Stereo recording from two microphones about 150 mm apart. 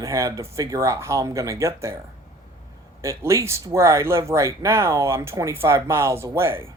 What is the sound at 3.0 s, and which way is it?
Speech, 20° right (ahead or behind).